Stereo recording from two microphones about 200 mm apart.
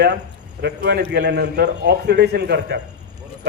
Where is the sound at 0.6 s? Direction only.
55° right (ahead or behind).